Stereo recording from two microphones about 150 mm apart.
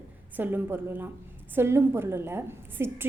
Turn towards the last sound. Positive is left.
turn(degrees=-15)  # may be behind; listen again after turning